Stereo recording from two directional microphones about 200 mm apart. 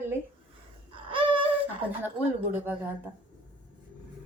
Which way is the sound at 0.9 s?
25° right (ahead or behind).